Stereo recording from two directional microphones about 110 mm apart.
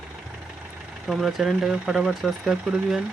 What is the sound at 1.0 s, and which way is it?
Speech, centre (ahead or behind).